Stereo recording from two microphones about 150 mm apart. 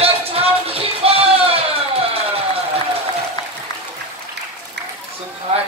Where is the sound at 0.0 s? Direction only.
40° right (ahead or behind).